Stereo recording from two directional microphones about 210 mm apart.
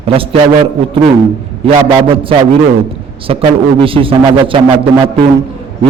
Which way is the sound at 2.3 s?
25° right (ahead or behind).